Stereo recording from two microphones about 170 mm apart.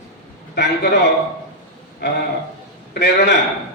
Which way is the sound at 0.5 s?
75° left (ahead or behind).